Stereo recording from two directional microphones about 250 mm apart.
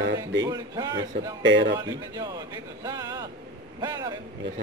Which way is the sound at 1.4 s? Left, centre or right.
Right.